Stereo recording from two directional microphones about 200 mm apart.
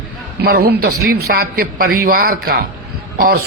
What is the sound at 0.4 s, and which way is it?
A man's voice, 50° right (ahead or behind).